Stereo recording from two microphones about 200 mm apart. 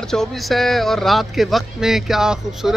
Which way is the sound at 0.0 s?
Centre (ahead or behind).